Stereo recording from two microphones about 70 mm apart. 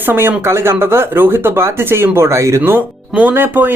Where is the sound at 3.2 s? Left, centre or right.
Right.